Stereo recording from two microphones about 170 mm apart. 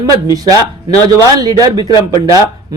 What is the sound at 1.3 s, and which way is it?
A man's voice, 20° right (ahead or behind).